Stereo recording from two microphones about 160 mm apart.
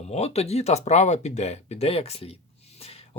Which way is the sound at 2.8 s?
40° left (ahead or behind).